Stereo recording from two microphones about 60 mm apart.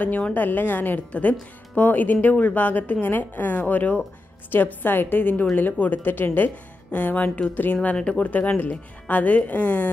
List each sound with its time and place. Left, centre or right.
0.0 s a woman's voice: left
7.2 s speech: centre
7.5 s speech: left
7.9 s speech: centre
8.3 s a woman's voice: left